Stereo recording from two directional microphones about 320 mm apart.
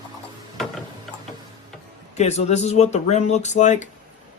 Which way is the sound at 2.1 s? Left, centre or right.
Left.